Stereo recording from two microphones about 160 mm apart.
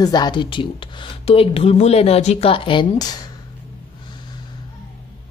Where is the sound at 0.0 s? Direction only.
25° left (ahead or behind).